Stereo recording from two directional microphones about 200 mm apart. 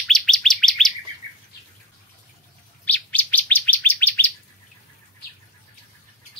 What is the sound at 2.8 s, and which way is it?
Bird, 10° left (ahead or behind).